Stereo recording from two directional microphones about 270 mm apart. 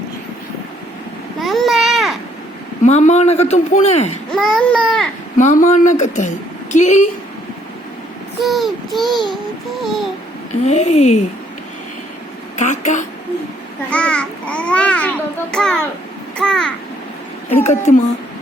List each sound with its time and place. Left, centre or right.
1.4 s babbling: centre
2.8 s speech: left
4.3 s a child's voice: centre
5.4 s speech: left
8.4 s a child's voice: centre
10.7 s speech: left
12.5 s speech: left
13.9 s a child's voice: centre
17.6 s speech: left